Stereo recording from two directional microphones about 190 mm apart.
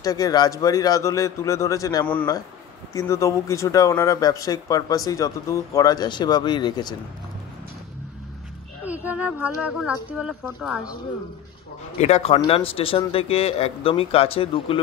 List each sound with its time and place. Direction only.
0.0 s speech: 20° left (ahead or behind)
8.8 s speech: 10° right (ahead or behind)
12.0 s speech: 35° left (ahead or behind)